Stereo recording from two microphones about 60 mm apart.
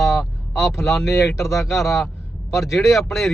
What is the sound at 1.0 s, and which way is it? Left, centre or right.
Speech, left.